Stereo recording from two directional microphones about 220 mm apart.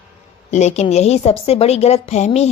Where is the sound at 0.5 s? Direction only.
30° left (ahead or behind).